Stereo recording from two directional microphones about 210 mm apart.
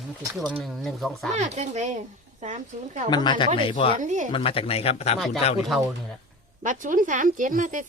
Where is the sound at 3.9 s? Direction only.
35° right (ahead or behind).